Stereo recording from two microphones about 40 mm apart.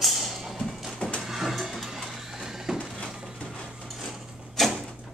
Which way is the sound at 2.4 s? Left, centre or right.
Centre.